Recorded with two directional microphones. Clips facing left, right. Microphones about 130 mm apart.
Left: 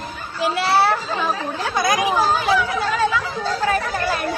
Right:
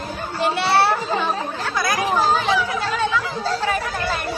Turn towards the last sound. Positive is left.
turn(degrees=0)  # may be behind; listen again after turning